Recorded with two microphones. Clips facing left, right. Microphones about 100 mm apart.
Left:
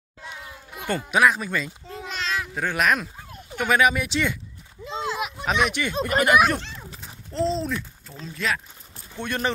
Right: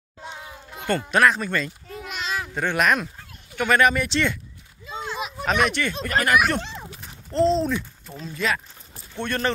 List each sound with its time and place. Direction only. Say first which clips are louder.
0.2 s music: right 2 dB; 25° right (ahead or behind)
0.7 s speech: right 1 dB; 10° left (ahead or behind)
2.0 s babbling: left 1 dB; 5° right (ahead or behind)
2.5 s speech: right 2 dB; centre (ahead or behind)
4.8 s a sound: left 4 dB; 70° left (ahead or behind)
5.1 s a sound: right 3 dB; 5° left (ahead or behind)
6.0 s speech: left 2 dB; 20° left (ahead or behind)
6.5 s speech: right 2 dB; centre (ahead or behind)
9.2 s speech: right 1 dB; 10° left (ahead or behind)